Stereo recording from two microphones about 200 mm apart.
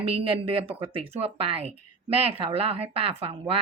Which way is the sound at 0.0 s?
30° right (ahead or behind).